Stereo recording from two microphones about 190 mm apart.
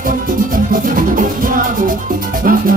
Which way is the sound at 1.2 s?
45° right (ahead or behind).